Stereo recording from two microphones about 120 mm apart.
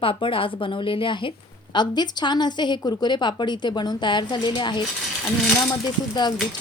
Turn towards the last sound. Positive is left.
turn(degrees=35)  # may be behind; listen again after turning